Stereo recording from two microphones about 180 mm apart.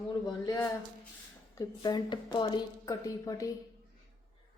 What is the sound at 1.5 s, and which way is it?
Speech, 25° left (ahead or behind).